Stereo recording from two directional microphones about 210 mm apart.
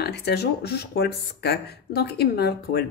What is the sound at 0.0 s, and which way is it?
Speech, 50° left (ahead or behind).